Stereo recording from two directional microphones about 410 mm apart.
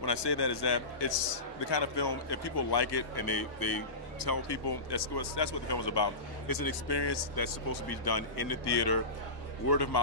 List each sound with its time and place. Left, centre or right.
0.0 s a man's voice: left
2.0 s a man's voice: left
6.4 s speech: left